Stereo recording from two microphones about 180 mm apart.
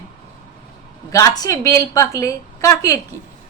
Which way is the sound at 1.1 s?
20° left (ahead or behind).